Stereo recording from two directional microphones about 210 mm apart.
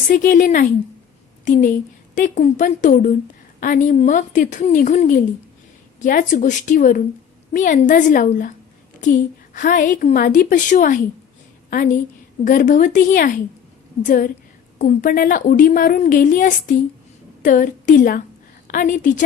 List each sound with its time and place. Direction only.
0.1 s a woman's voice: 40° left (ahead or behind)